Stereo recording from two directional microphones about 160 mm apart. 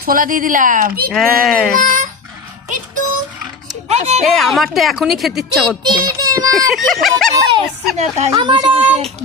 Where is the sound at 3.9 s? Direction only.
45° right (ahead or behind).